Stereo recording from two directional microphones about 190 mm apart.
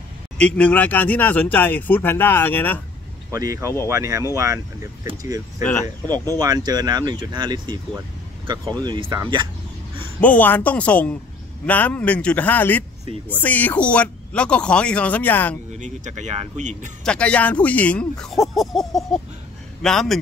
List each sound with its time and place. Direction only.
0.4 s speech: 5° left (ahead or behind)
3.3 s speech: 15° right (ahead or behind)
8.8 s speech: 25° right (ahead or behind)
10.2 s speech: 10° left (ahead or behind)
15.8 s speech: 40° right (ahead or behind)
17.0 s speech: 5° left (ahead or behind)